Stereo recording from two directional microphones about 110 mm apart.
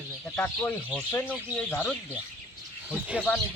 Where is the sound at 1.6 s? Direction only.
15° left (ahead or behind).